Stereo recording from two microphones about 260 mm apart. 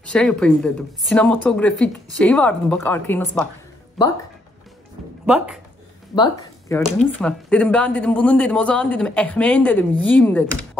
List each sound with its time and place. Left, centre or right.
0.1 s a woman's voice: centre
5.2 s a woman's voice: centre
6.1 s speech: centre
6.8 s a woman's voice: centre